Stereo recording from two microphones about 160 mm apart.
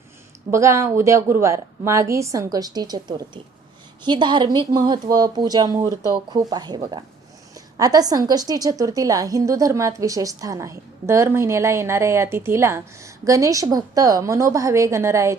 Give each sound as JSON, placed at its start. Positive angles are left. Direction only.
{"t": 0.5, "sound": "a woman's voice", "side_deg": -20}